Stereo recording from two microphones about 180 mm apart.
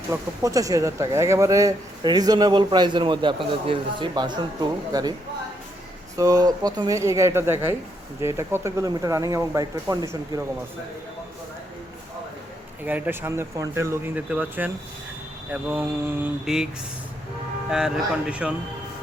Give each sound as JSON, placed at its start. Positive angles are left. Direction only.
{"t": 0.1, "sound": "speech", "side_deg": -20}
{"t": 6.1, "sound": "speech", "side_deg": -20}
{"t": 12.8, "sound": "speech", "side_deg": -10}
{"t": 17.7, "sound": "speech", "side_deg": -5}